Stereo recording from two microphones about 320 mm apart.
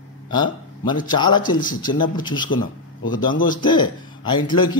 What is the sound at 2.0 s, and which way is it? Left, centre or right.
A man's voice, centre.